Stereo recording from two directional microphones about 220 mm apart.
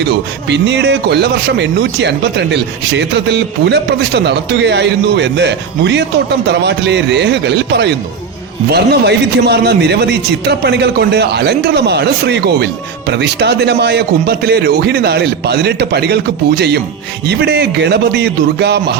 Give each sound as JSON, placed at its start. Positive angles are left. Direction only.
{"t": 0.4, "sound": "speech", "side_deg": -50}